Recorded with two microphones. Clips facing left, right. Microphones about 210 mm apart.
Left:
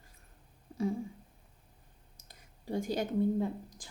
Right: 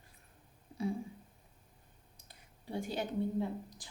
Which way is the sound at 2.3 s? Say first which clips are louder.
Left 6 dB; 40° left (ahead or behind).